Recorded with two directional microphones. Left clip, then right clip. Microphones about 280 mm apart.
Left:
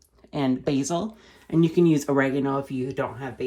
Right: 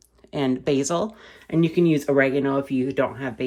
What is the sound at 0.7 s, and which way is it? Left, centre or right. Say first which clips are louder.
Speech: right 4 dB; centre.